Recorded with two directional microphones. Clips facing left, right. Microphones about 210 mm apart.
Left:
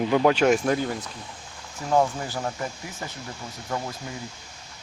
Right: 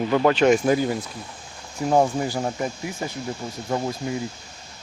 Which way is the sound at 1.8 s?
25° right (ahead or behind).